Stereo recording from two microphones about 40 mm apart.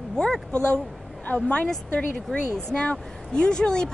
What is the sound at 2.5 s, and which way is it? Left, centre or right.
Speech, left.